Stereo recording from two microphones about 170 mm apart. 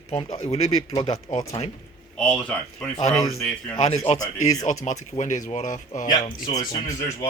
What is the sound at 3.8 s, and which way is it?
Speech, 40° left (ahead or behind).